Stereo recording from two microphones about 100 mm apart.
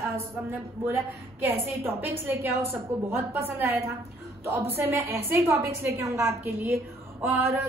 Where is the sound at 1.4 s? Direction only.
25° right (ahead or behind).